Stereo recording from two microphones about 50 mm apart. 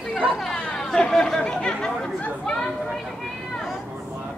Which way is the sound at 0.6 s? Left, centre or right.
Centre.